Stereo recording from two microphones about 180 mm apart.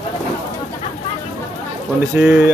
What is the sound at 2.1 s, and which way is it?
Speech, 5° right (ahead or behind).